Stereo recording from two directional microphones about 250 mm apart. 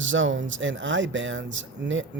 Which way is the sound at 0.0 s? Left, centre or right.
Right.